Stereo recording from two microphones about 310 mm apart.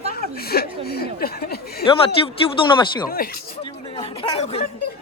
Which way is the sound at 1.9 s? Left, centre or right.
Centre.